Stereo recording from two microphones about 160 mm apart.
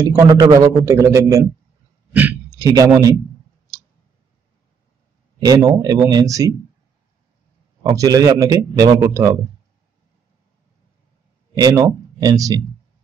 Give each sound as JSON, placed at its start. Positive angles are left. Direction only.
{"t": 0.0, "sound": "a man's voice", "side_deg": -25}
{"t": 2.1, "sound": "a sound", "side_deg": -10}
{"t": 2.7, "sound": "a man's voice", "side_deg": -20}
{"t": 5.4, "sound": "a man's voice", "side_deg": -25}
{"t": 7.8, "sound": "a man's voice", "side_deg": -20}
{"t": 11.5, "sound": "speech", "side_deg": -25}